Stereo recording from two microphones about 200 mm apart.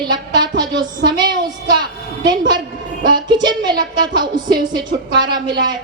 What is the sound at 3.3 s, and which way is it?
A woman's voice, 20° right (ahead or behind).